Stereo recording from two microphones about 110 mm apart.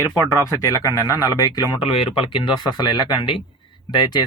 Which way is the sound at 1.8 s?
50° left (ahead or behind).